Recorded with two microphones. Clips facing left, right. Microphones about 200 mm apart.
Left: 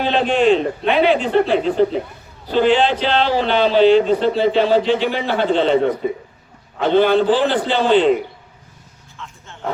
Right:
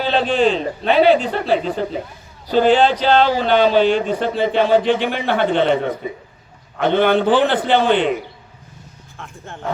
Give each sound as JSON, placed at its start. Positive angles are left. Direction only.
{"t": 0.0, "sound": "a man's voice", "side_deg": -35}
{"t": 9.1, "sound": "vehicle", "side_deg": -55}